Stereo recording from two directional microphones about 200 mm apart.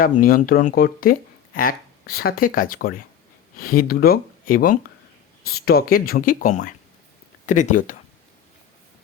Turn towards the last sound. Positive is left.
turn(degrees=40)  # may be behind; listen again after turning